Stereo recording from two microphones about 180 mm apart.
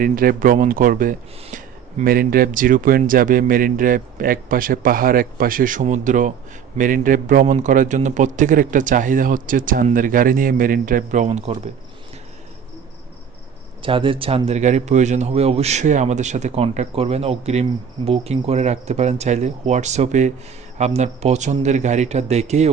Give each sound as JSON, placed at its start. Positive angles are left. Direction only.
{"t": 0.0, "sound": "a man's voice", "side_deg": -50}
{"t": 13.8, "sound": "a man's voice", "side_deg": -30}